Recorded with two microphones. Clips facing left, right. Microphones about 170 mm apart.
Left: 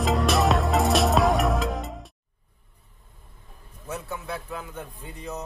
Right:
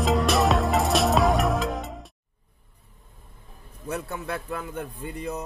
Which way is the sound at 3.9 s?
55° right (ahead or behind).